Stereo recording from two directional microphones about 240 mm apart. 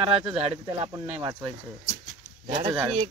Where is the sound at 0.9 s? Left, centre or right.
Centre.